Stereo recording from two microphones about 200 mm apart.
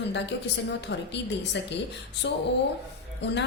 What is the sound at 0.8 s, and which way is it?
A woman's voice, 60° left (ahead or behind).